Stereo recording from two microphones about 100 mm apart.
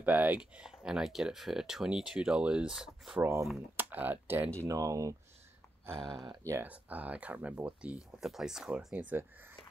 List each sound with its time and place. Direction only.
0.0 s speech: 15° right (ahead or behind)
3.2 s speech: 30° right (ahead or behind)
3.7 s speech: 15° right (ahead or behind)
4.6 s speech: 35° right (ahead or behind)
6.4 s speech: 25° right (ahead or behind)
6.7 s speech: 15° right (ahead or behind)